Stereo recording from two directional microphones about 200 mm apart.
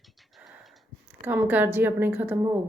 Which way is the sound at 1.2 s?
10° right (ahead or behind).